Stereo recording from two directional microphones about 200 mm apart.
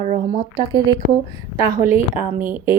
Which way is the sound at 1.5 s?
35° left (ahead or behind).